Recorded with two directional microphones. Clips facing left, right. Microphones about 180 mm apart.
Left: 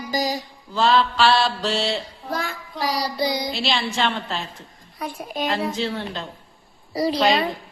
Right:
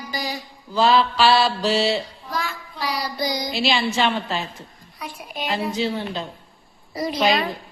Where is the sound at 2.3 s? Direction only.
50° left (ahead or behind).